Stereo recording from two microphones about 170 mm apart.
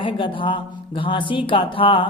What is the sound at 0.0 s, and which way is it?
A man's voice, 30° left (ahead or behind).